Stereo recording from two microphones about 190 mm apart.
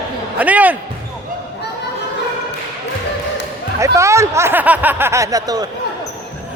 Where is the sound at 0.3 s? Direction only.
10° right (ahead or behind).